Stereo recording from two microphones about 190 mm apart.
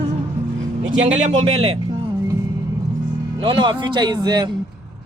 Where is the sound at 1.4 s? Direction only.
30° right (ahead or behind).